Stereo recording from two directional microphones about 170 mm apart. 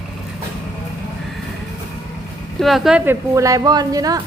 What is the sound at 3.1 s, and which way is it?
A woman's voice, 20° right (ahead or behind).